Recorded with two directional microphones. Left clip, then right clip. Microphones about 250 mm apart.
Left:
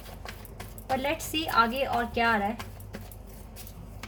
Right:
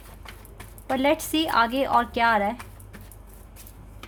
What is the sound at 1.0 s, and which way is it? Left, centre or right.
A woman's voice, right.